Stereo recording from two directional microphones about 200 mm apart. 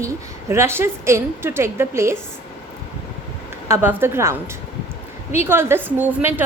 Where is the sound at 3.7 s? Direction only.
10° right (ahead or behind).